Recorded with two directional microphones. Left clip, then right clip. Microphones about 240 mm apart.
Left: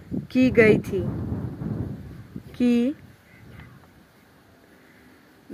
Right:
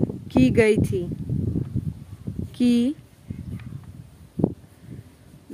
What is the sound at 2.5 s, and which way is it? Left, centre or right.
Speech, centre.